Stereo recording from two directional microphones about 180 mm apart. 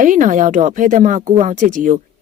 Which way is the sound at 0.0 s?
45° right (ahead or behind).